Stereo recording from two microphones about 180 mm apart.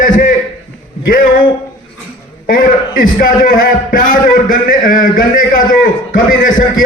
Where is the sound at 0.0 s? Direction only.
45° left (ahead or behind).